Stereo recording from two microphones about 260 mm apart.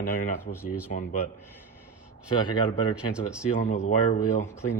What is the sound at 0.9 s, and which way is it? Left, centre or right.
Speech, left.